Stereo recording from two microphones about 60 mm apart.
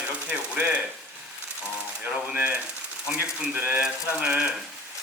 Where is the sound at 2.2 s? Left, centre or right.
Right.